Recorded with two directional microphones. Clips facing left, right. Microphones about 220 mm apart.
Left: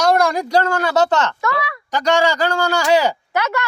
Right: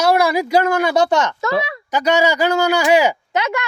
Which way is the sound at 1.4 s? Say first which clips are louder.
Right 3 dB; 25° right (ahead or behind).